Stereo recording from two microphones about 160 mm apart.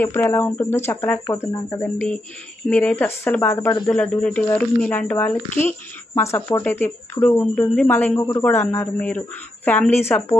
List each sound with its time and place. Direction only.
0.0 s speech: 15° left (ahead or behind)
1.2 s speech: 20° left (ahead or behind)
1.8 s speech: 10° left (ahead or behind)